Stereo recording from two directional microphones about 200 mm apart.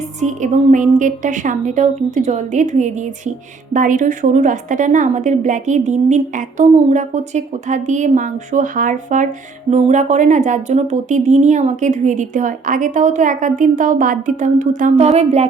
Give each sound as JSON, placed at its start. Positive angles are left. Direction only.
{"t": 0.2, "sound": "speech", "side_deg": -35}